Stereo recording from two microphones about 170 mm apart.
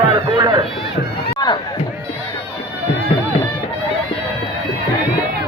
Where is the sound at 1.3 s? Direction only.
25° left (ahead or behind).